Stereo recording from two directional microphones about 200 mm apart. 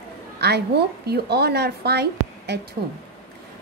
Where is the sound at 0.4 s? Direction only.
55° right (ahead or behind).